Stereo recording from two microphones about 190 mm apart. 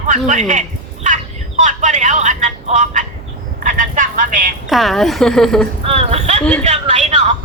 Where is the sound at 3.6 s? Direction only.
40° right (ahead or behind).